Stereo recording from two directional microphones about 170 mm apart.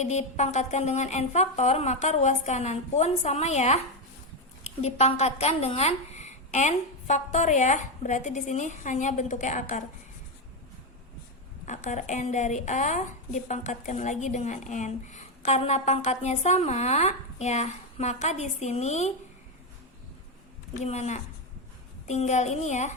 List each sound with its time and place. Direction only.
0.0 s a woman's voice: 40° left (ahead or behind)
11.6 s a woman's voice: 45° left (ahead or behind)
20.7 s a woman's voice: 40° left (ahead or behind)